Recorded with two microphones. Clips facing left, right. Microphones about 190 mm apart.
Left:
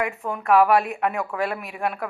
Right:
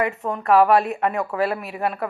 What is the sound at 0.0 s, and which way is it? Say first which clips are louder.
A woman's voice: right 3 dB; centre (ahead or behind).